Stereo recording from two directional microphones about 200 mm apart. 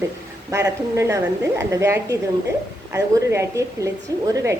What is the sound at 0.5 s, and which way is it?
A woman's voice, 15° right (ahead or behind).